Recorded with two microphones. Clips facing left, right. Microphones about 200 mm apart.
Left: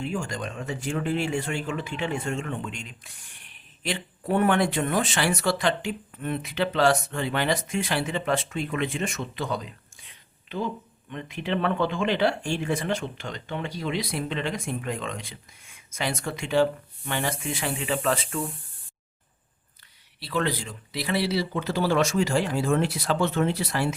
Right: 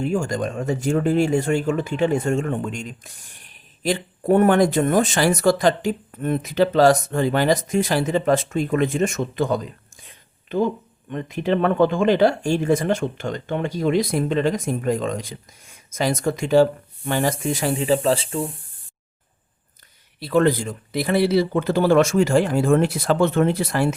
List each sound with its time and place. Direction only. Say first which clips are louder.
0.0 s speech: right 8 dB; 45° right (ahead or behind); by 18.5 s 30° right (ahead or behind)
20.1 s speech: right 9 dB; 45° right (ahead or behind)